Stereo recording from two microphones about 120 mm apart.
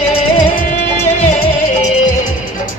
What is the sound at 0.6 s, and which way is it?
Music, 90° left.